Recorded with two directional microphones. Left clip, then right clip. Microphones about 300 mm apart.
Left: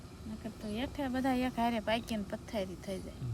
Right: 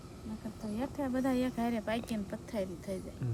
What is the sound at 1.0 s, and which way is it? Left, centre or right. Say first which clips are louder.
Speech: even; centre.